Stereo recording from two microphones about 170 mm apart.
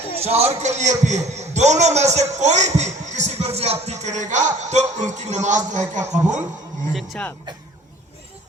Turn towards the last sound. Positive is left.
turn(degrees=0)  # may be behind; listen again after turning